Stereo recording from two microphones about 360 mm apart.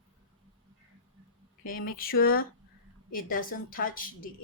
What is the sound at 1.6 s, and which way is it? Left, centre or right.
Speech, left.